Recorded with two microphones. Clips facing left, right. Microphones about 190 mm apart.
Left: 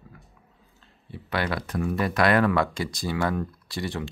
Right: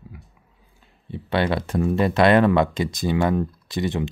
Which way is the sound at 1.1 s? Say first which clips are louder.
Right 6 dB; 25° right (ahead or behind).